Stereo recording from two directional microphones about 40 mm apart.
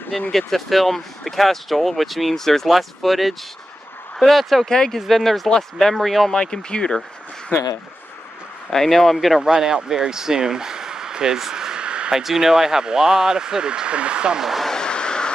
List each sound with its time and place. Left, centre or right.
0.3 s speech: centre
4.6 s speech: centre
4.9 s speech: centre
6.3 s speech: left
8.6 s speech: centre
9.4 s speech: centre
12.1 s speech: centre; by 14.4 s right
14.8 s vehicle: left